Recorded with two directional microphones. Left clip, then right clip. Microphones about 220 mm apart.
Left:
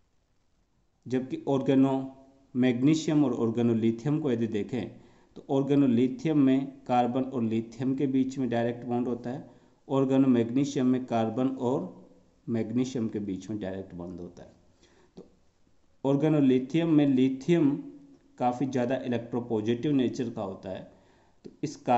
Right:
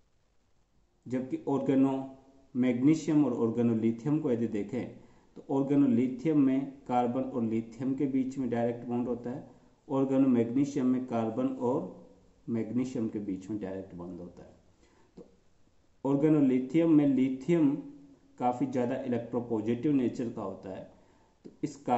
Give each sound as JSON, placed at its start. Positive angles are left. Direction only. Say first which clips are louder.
{"t": 1.0, "sound": "speech", "louder": "left 3 dB", "side_deg": 35}
{"t": 16.0, "sound": "speech", "louder": "left 1 dB", "side_deg": 35}
{"t": 21.4, "sound": "a sound", "louder": "left 1 dB", "side_deg": 35}